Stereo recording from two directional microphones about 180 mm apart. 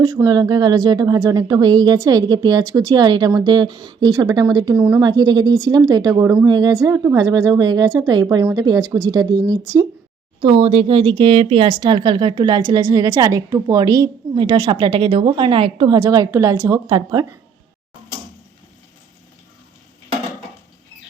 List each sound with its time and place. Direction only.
0.0 s a woman's voice: 20° right (ahead or behind)
10.4 s a woman's voice: 30° right (ahead or behind)